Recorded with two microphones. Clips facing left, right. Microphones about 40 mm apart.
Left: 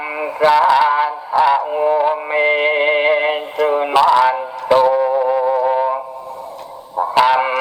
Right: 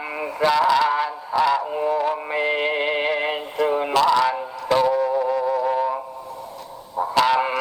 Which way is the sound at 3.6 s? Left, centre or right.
Left.